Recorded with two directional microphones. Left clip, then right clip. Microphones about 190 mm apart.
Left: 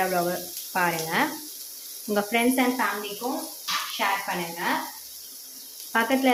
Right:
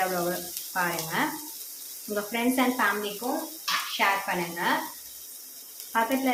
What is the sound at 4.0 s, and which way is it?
Speech, centre (ahead or behind).